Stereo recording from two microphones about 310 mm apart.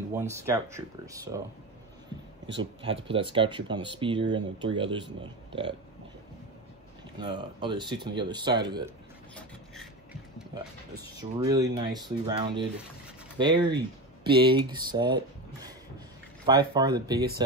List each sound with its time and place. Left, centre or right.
0.1 s speech: centre
2.6 s speech: centre
7.2 s speech: centre
11.1 s speech: centre